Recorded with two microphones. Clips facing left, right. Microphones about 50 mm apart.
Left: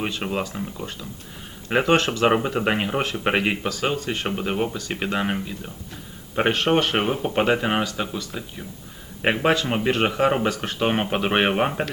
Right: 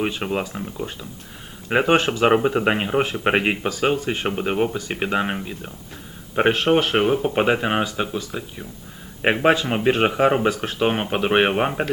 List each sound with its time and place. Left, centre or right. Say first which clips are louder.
0.0 s speech: right 2 dB; centre
0.5 s speech: right 2 dB; centre
6.3 s speech: right 2 dB; centre
7.3 s speech: right 1 dB; centre
9.3 s a man's voice: right 3 dB; right; by 11.9 s centre